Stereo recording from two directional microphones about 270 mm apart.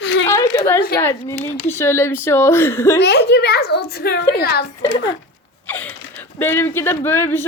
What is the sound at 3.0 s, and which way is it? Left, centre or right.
A woman's voice, left.